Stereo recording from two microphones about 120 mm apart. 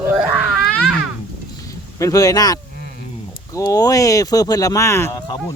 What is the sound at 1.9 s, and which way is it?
Speech, 30° left (ahead or behind).